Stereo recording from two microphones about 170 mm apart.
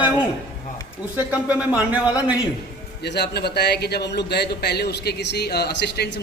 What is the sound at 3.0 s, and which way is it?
A man's voice, 80° left.